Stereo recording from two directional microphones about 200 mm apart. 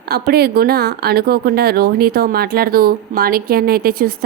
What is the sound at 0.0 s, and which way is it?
Speech, 50° right (ahead or behind).